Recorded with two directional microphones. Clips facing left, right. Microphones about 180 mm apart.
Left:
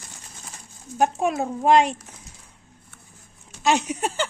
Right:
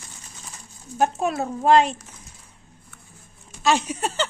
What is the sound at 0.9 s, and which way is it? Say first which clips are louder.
A woman's voice: left 1 dB; 15° left (ahead or behind).